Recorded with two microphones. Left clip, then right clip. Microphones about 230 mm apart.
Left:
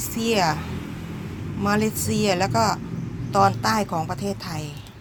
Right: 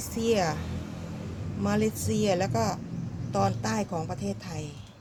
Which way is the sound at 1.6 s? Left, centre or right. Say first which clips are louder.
Left 5 dB; centre.